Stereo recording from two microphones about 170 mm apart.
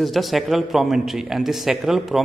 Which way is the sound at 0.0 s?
Centre (ahead or behind).